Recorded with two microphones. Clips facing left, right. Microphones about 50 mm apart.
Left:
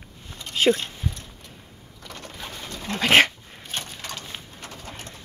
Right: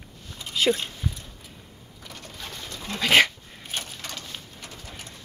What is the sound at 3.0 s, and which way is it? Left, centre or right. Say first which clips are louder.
Dog: left 2 dB; centre.